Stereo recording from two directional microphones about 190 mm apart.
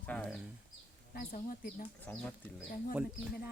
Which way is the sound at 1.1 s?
50° left (ahead or behind).